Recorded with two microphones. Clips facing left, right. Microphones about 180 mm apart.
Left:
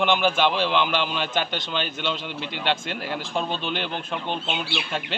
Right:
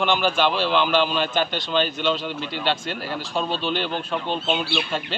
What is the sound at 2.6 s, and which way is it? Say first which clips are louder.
A man's voice: even; 15° left (ahead or behind).